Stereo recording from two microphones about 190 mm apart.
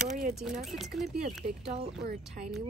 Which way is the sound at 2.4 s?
45° right (ahead or behind).